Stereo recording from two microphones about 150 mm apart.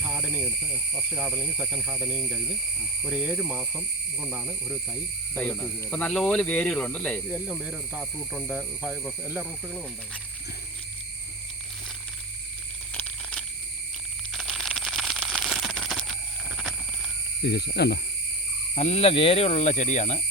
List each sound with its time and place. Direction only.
0.0 s speech: 10° right (ahead or behind)
5.3 s speech: 10° left (ahead or behind)
7.3 s speech: 5° right (ahead or behind)
12.9 s a sound: 10° left (ahead or behind)
14.3 s coin: centre (ahead or behind)
16.6 s a sound: 5° left (ahead or behind)
17.4 s speech: 90° left
18.7 s speech: 50° left (ahead or behind)